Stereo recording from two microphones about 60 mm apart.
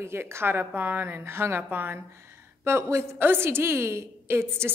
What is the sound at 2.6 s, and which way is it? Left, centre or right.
Speech, right.